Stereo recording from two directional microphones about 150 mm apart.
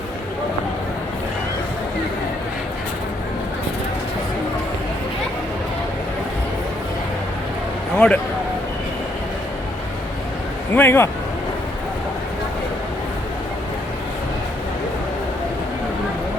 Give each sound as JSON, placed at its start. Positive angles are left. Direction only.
{"t": 7.9, "sound": "a man's voice", "side_deg": 5}
{"t": 10.8, "sound": "speech", "side_deg": 15}